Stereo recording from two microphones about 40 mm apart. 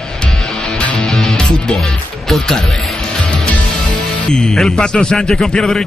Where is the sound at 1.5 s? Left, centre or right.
Centre.